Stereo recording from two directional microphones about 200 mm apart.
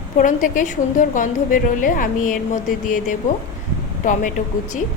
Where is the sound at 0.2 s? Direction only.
40° left (ahead or behind).